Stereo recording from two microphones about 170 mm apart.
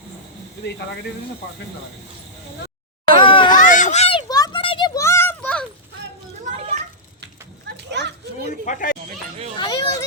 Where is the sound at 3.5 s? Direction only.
50° left (ahead or behind).